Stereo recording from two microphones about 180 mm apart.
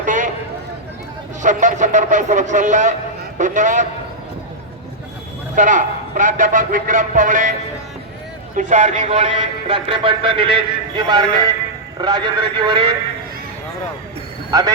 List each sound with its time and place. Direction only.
0.0 s a sound: 45° right (ahead or behind)
1.4 s a man's voice: 45° right (ahead or behind)
5.5 s a man's voice: 45° right (ahead or behind)
8.5 s a man's voice: 45° right (ahead or behind); by 12.9 s 25° right (ahead or behind)